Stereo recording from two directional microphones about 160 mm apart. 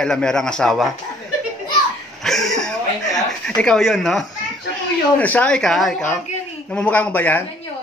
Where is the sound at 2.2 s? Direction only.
Centre (ahead or behind).